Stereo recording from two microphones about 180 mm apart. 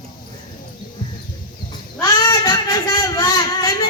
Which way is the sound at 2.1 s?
20° left (ahead or behind).